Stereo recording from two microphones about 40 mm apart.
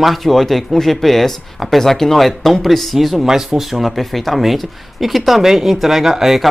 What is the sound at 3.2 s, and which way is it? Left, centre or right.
Speech, centre.